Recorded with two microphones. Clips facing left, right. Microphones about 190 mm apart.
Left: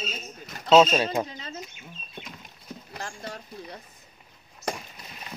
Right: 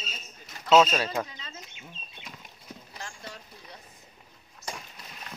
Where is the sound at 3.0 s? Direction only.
45° left (ahead or behind).